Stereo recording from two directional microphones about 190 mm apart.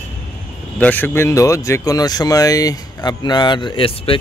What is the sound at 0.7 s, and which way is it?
Speech, 10° left (ahead or behind).